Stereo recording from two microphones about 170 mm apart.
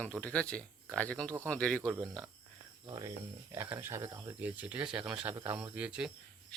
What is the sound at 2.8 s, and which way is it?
Speech, 25° right (ahead or behind).